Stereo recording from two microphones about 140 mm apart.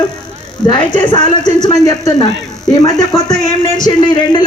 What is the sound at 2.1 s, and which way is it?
A man's voice, 30° left (ahead or behind).